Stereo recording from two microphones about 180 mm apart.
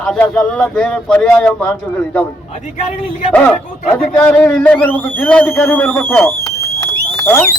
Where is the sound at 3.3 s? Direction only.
5° left (ahead or behind).